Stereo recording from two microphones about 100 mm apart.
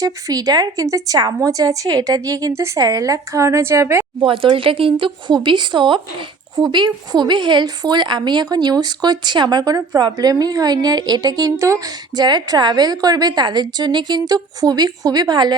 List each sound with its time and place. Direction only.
0.0 s a woman's voice: 40° right (ahead or behind)
4.2 s speech: 60° right (ahead or behind)